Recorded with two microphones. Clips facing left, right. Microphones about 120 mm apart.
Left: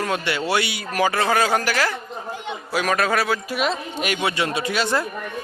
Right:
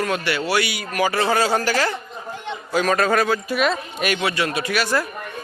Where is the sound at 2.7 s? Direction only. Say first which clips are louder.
Right 2 dB; 10° left (ahead or behind).